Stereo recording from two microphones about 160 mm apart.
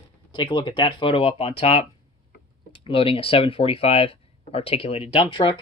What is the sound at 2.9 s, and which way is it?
Speech, 35° left (ahead or behind).